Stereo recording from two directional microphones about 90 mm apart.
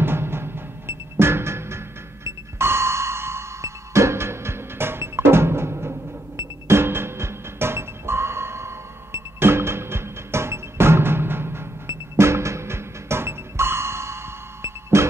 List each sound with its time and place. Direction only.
0.0 s music: 25° right (ahead or behind)